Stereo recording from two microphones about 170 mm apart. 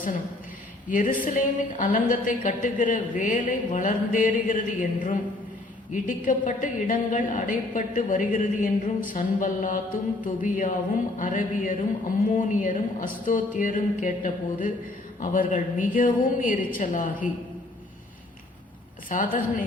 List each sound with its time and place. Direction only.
0.9 s a woman's voice: 50° left (ahead or behind)
19.0 s a woman's voice: 50° left (ahead or behind)